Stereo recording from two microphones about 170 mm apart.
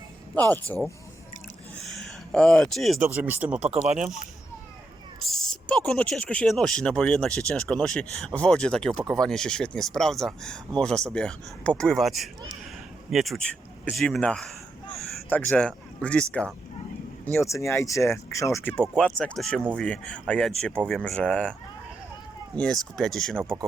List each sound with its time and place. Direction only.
0.3 s speech: 10° left (ahead or behind)
1.8 s a sound: centre (ahead or behind)
3.0 s speech: 10° right (ahead or behind)
5.2 s speech: centre (ahead or behind)
17.3 s speech: 15° left (ahead or behind)
22.5 s speech: 5° left (ahead or behind)